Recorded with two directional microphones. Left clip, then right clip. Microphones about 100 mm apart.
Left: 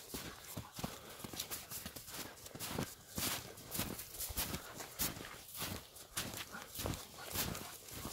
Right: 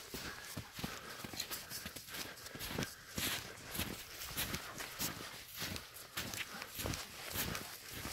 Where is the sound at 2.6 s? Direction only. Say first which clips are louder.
Right 1 dB; 5° right (ahead or behind).